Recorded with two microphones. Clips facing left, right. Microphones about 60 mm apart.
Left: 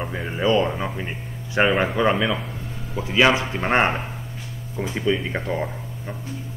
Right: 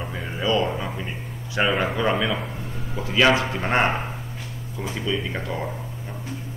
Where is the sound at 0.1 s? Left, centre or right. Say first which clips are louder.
Left 3 dB; left.